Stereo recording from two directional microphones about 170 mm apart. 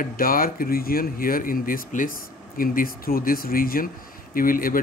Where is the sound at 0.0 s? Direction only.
55° left (ahead or behind).